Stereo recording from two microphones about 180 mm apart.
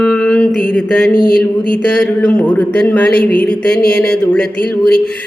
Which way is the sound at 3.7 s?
60° left (ahead or behind).